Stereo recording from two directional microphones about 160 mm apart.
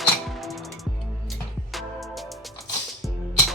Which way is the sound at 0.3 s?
Centre (ahead or behind).